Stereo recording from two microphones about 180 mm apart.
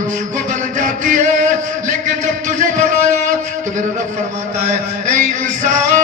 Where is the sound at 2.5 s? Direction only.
45° right (ahead or behind).